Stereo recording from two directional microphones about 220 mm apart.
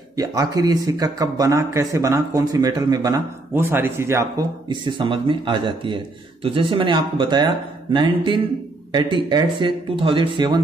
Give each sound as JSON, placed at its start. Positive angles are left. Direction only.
{"t": 0.1, "sound": "a man's voice", "side_deg": -15}